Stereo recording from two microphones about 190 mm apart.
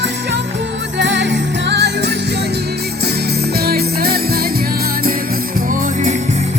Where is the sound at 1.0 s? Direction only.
70° right (ahead or behind).